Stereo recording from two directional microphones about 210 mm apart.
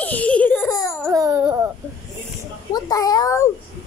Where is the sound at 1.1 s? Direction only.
10° right (ahead or behind).